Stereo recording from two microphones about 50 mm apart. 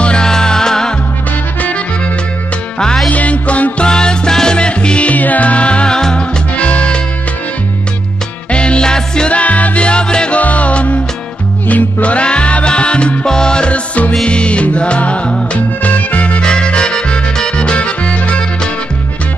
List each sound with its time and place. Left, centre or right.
0.0 s music: centre
3.1 s music: left
3.8 s music: centre
5.9 s music: centre
6.5 s music: left
8.5 s music: left
9.3 s music: left
10.4 s music: left